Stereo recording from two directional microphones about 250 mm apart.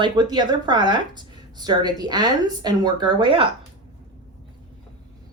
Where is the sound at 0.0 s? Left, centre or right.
Centre.